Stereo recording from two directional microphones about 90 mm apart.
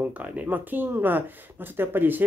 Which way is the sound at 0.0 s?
15° right (ahead or behind).